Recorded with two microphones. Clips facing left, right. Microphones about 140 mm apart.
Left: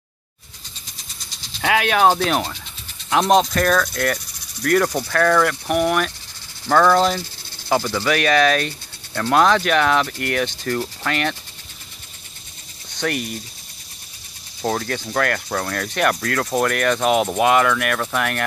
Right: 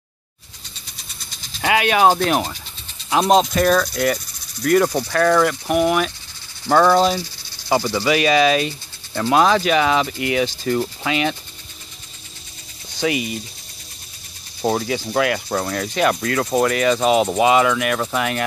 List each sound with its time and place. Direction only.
1.6 s speech: centre (ahead or behind)
6.7 s rub: 10° right (ahead or behind)
12.9 s speech: 5° right (ahead or behind)
14.6 s speech: 10° right (ahead or behind)